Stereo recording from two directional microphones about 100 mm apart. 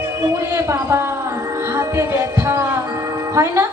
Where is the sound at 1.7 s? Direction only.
25° right (ahead or behind).